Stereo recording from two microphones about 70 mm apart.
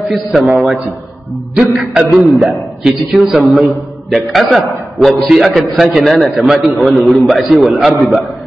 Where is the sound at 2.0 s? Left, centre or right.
Centre.